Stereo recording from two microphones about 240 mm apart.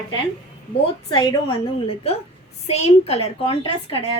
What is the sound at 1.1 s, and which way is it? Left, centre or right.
A woman's voice, centre.